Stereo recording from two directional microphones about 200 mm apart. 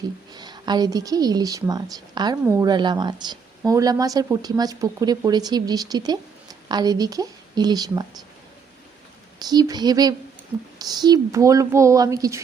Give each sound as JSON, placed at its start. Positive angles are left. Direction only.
{"t": 0.3, "sound": "speech", "side_deg": -20}
{"t": 9.4, "sound": "speech", "side_deg": -20}